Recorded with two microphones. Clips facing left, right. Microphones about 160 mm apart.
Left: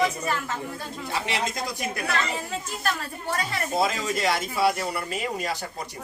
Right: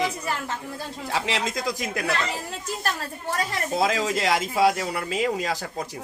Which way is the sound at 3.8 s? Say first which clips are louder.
Right 2 dB; 90° right.